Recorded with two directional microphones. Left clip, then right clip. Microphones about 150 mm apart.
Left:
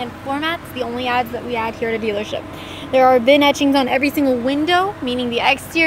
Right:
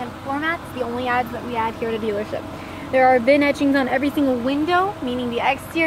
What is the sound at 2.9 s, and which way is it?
Speech, 30° left (ahead or behind).